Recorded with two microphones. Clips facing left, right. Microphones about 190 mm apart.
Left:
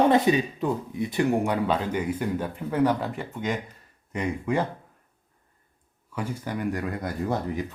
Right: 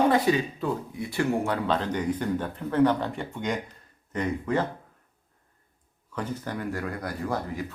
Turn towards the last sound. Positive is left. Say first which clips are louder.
# left 3 dB
turn(degrees=20)  # may be behind; listen again after turning